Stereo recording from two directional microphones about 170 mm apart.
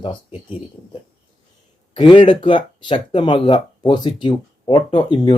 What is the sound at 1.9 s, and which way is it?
Speech, 30° left (ahead or behind).